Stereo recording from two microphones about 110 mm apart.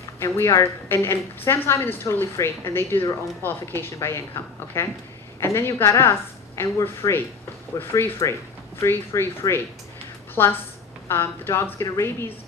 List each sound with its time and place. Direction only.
0.2 s speech: 25° left (ahead or behind)